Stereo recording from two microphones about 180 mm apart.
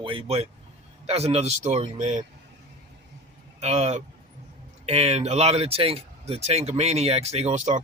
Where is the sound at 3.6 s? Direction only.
35° right (ahead or behind).